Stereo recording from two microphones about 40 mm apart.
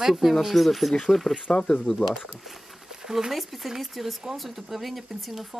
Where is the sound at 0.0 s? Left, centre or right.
Centre.